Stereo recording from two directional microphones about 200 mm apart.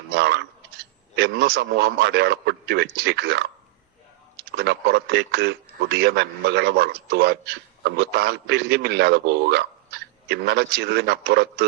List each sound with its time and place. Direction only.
0.1 s a man's voice: 55° right (ahead or behind)
4.5 s a man's voice: 55° right (ahead or behind)